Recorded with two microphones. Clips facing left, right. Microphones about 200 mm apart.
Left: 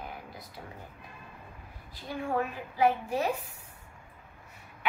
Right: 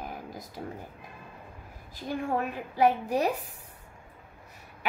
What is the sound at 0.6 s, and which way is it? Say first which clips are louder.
Speech: right 8 dB; 40° right (ahead or behind).